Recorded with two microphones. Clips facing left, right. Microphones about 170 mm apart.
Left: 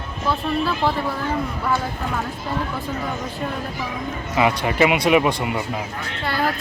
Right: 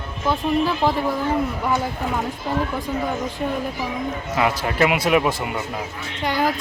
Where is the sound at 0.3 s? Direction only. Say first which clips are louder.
Right 2 dB; 15° right (ahead or behind).